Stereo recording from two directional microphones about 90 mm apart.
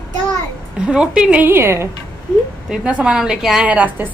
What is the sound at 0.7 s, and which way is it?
Speech, 10° right (ahead or behind).